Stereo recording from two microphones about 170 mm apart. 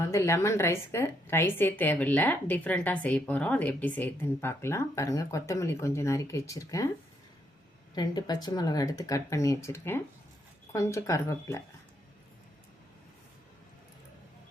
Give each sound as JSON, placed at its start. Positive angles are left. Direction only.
{"t": 0.0, "sound": "a woman's voice", "side_deg": 15}
{"t": 7.9, "sound": "a woman's voice", "side_deg": 25}